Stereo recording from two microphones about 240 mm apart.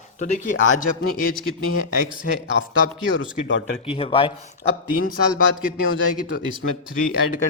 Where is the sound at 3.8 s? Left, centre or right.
Left.